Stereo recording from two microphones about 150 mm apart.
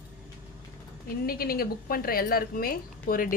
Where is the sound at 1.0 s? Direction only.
85° left.